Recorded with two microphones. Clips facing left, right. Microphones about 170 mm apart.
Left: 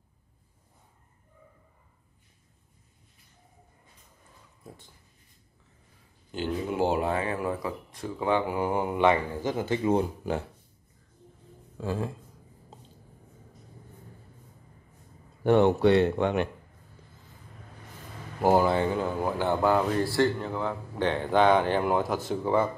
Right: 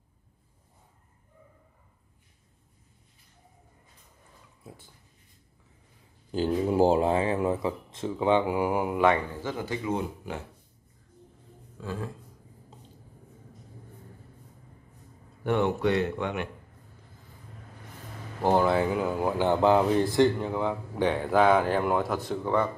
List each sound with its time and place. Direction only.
6.3 s speech: 35° right (ahead or behind); by 9.2 s centre (ahead or behind)
9.4 s speech: 20° left (ahead or behind)
11.8 s speech: 30° left (ahead or behind)
15.4 s speech: 35° left (ahead or behind)
18.4 s speech: 5° left (ahead or behind)